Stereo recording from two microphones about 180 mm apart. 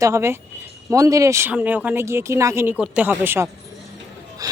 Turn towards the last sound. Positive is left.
turn(degrees=-20)  # may be behind; listen again after turning